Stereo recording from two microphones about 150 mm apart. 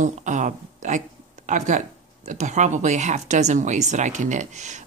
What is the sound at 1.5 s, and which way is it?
Speech, 55° right (ahead or behind).